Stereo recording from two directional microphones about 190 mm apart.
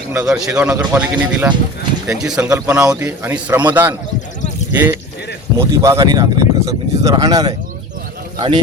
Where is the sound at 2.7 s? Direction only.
15° right (ahead or behind).